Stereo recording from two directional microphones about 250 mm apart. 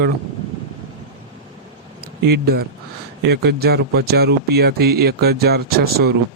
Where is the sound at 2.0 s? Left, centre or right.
Right.